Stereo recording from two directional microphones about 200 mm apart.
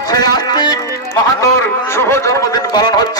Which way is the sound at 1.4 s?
15° left (ahead or behind).